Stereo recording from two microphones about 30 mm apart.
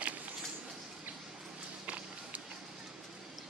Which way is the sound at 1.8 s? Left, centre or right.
Right.